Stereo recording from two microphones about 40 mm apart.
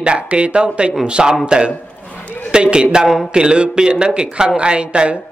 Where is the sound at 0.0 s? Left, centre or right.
Right.